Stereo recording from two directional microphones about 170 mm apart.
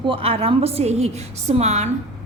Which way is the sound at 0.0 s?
30° right (ahead or behind).